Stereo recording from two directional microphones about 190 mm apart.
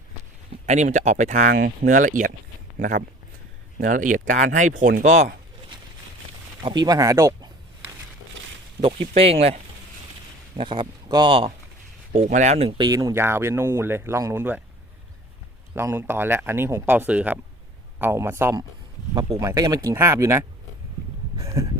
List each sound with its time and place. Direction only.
0.6 s speech: 40° right (ahead or behind)
1.5 s speech: 60° right (ahead or behind)
1.9 s speech: 45° right (ahead or behind)
6.6 s speech: 20° right (ahead or behind)
8.8 s speech: 30° right (ahead or behind)
10.6 s speech: 25° right (ahead or behind)
12.1 s speech: 40° right (ahead or behind); by 14.6 s 10° right (ahead or behind)
15.7 s speech: 15° right (ahead or behind)
21.3 s a sound: 15° right (ahead or behind)